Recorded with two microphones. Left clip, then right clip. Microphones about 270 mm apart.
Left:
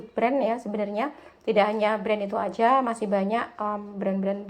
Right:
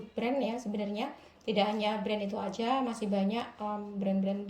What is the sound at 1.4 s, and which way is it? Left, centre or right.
Speech, left.